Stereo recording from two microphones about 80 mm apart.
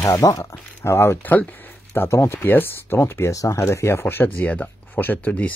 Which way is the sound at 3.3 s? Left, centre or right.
Left.